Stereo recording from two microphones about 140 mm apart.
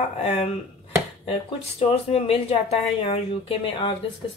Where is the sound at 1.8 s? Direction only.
45° left (ahead or behind).